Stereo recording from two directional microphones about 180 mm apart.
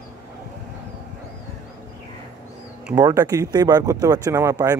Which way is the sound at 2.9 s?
20° right (ahead or behind).